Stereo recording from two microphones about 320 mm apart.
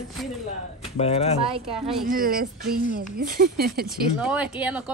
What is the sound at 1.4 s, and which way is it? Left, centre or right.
Speech, centre.